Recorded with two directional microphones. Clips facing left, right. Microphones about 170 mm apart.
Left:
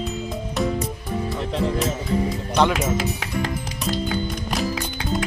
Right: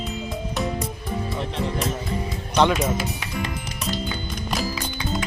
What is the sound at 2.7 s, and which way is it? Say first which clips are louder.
Speech: left 1 dB; 90° left.